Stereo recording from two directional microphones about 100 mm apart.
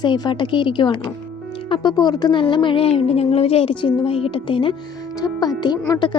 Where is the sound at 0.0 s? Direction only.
50° left (ahead or behind).